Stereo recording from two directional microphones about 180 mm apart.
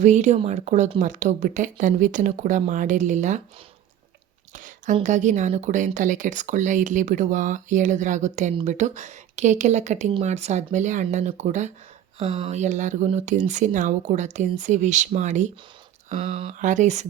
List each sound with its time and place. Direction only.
0.0 s speech: 40° right (ahead or behind)
4.5 s a sound: 45° right (ahead or behind)
5.0 s speech: 40° right (ahead or behind)